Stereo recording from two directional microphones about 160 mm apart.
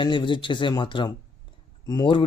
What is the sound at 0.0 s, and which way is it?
Speech, 30° left (ahead or behind).